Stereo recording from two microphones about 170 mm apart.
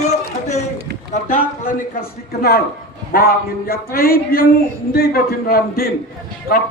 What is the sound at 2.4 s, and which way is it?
Speech, 65° left (ahead or behind).